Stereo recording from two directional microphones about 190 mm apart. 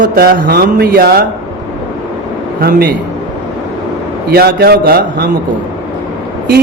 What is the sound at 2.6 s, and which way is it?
Speech, 55° right (ahead or behind).